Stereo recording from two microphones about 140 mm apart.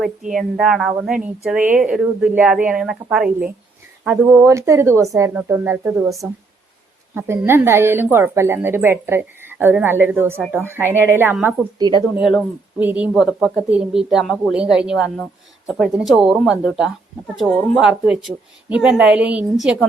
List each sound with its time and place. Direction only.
0.3 s a woman's voice: centre (ahead or behind)
4.4 s speech: 20° right (ahead or behind)
5.3 s speech: 10° right (ahead or behind)
11.8 s speech: 30° right (ahead or behind)
12.8 s a woman's voice: 10° right (ahead or behind)